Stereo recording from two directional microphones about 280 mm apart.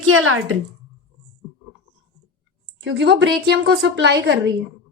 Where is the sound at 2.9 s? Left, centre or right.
Right.